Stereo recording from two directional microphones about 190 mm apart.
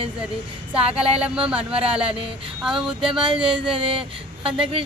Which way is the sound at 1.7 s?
30° right (ahead or behind).